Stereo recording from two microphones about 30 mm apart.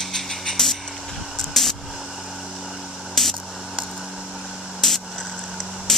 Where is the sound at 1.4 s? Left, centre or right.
Centre.